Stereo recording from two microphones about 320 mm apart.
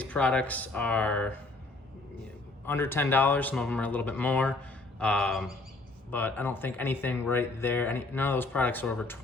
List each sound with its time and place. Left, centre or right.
0.0 s speech: centre
2.6 s speech: centre